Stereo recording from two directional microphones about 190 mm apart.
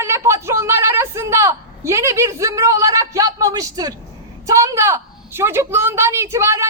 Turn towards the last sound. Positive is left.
turn(degrees=-15)  # may be behind; listen again after turning